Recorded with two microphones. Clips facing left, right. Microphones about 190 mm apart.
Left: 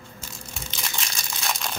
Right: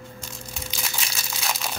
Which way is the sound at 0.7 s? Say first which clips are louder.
Left 1 dB; 5° right (ahead or behind).